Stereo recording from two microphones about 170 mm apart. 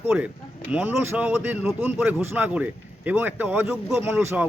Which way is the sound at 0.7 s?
10° right (ahead or behind).